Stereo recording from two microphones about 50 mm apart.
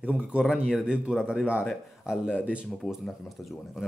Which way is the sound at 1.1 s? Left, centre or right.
Centre.